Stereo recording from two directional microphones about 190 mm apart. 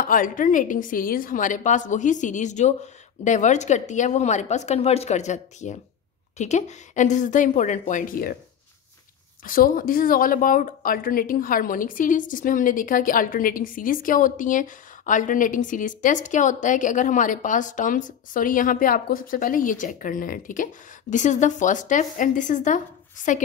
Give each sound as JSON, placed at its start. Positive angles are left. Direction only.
{"t": 0.0, "sound": "a woman's voice", "side_deg": 45}
{"t": 9.4, "sound": "speech", "side_deg": 45}